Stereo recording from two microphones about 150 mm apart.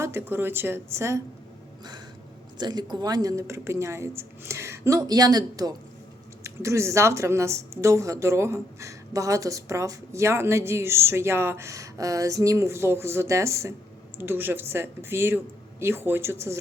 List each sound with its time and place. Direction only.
0.0 s speech: 15° right (ahead or behind)
2.6 s speech: 30° right (ahead or behind)